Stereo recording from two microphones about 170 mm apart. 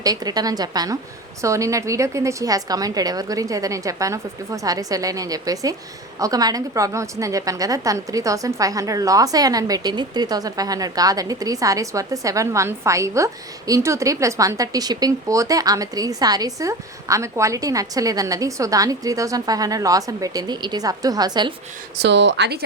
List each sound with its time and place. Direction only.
0.0 s a woman's voice: 20° right (ahead or behind)
22.0 s speech: 90° right